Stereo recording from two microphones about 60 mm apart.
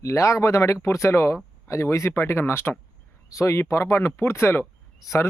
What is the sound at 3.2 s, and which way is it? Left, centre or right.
Speech, left.